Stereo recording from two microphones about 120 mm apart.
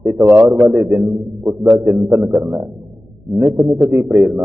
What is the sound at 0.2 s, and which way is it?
Speech, 20° right (ahead or behind).